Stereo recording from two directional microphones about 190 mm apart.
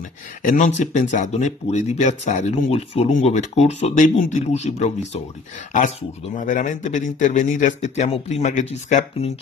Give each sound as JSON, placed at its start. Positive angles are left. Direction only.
{"t": 0.4, "sound": "speech", "side_deg": 40}
{"t": 6.3, "sound": "speech", "side_deg": 40}